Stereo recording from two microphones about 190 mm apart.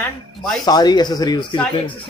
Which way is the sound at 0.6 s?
20° left (ahead or behind).